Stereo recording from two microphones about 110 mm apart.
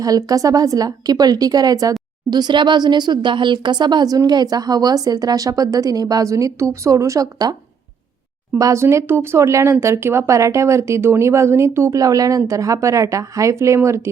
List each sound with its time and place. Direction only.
0.0 s a woman's voice: 35° right (ahead or behind)
8.5 s speech: 30° right (ahead or behind)